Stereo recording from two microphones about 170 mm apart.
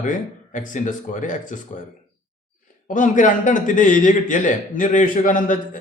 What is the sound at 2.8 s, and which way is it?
Speech, 50° left (ahead or behind).